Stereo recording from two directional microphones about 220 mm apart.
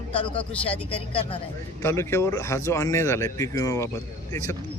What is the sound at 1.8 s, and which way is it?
Speech, 10° left (ahead or behind).